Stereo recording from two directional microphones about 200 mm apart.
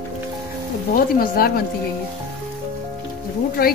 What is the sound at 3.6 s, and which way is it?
Speech, 50° left (ahead or behind).